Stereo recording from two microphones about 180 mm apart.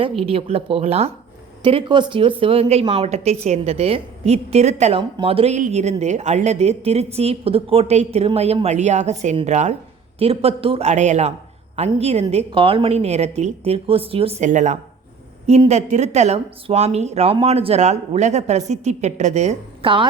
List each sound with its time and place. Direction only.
0.2 s speech: 30° right (ahead or behind)